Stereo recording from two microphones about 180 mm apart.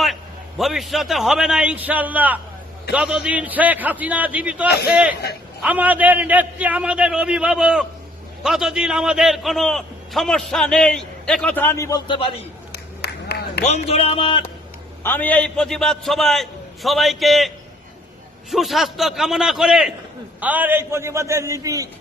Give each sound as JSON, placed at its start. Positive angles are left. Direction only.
{"t": 0.0, "sound": "a man's voice", "side_deg": 0}
{"t": 12.7, "sound": "a sound", "side_deg": 65}
{"t": 13.7, "sound": "speech", "side_deg": 35}
{"t": 15.0, "sound": "a man's voice", "side_deg": 10}
{"t": 18.5, "sound": "a man's voice", "side_deg": 0}